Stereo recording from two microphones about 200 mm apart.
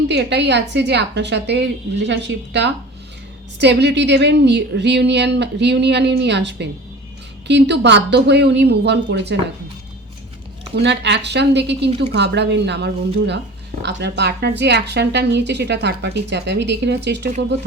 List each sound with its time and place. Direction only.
0.1 s speech: 60° right (ahead or behind)
10.8 s speech: 60° right (ahead or behind)